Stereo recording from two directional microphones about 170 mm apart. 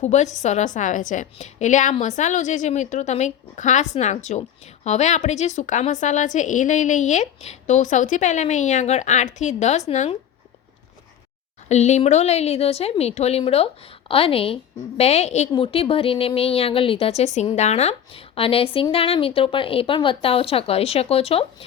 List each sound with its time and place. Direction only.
0.0 s a woman's voice: 45° left (ahead or behind)
11.7 s a woman's voice: 40° left (ahead or behind)